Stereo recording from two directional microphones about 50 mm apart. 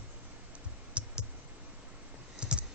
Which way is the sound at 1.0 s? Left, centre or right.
Right.